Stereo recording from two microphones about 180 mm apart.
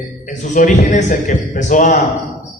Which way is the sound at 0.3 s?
45° left (ahead or behind).